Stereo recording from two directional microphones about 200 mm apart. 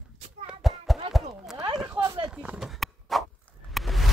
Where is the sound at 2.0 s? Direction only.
15° right (ahead or behind).